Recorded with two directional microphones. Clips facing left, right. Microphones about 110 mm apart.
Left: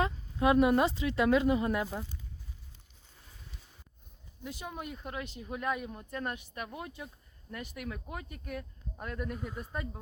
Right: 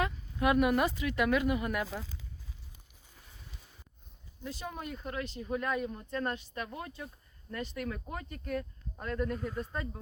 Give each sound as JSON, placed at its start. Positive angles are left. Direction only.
{"t": 0.0, "sound": "speech", "side_deg": 25}
{"t": 4.4, "sound": "speech", "side_deg": 10}